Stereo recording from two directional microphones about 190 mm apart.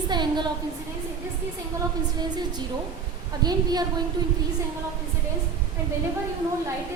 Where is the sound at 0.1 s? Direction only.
25° right (ahead or behind).